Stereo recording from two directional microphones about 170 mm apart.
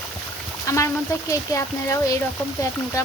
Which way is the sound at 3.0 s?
20° left (ahead or behind).